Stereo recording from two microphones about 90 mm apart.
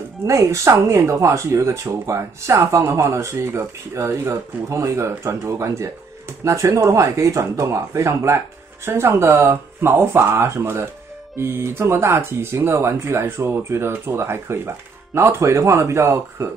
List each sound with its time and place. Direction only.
0.3 s speech: 30° right (ahead or behind)